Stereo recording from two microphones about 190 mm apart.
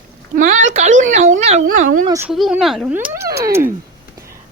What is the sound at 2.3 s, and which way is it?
Speech, centre (ahead or behind).